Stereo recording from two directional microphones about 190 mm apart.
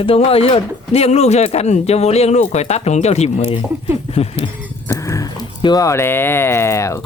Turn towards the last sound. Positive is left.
turn(degrees=15)  # may be behind; listen again after turning